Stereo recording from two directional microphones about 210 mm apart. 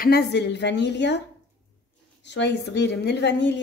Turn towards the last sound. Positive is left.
turn(degrees=55)  # may be behind; listen again after turning